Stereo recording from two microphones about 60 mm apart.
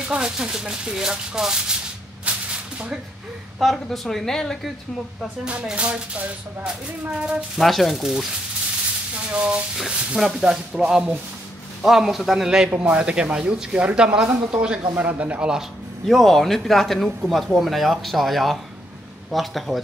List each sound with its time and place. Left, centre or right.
0.0 s a man's voice: centre
3.5 s speech: centre
5.8 s a man's voice: right
7.5 s speech: centre
8.0 s a man's voice: centre
9.1 s sizzle: centre
9.8 s a man's voice: centre
16.1 s speech: centre